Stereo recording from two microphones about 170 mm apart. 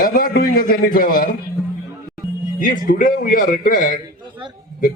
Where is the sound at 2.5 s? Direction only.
50° left (ahead or behind).